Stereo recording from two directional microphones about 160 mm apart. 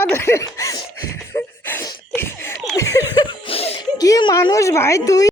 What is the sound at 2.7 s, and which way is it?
Laughter, 20° left (ahead or behind).